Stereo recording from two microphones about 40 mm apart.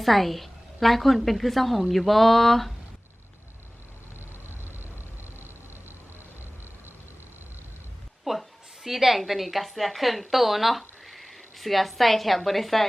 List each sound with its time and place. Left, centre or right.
0.0 s a woman's voice: centre
1.9 s a sound: centre
4.4 s vehicle: right
8.2 s a woman's voice: centre